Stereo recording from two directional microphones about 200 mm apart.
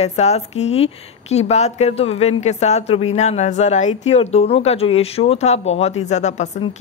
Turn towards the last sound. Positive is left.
turn(degrees=35)  # may be behind; listen again after turning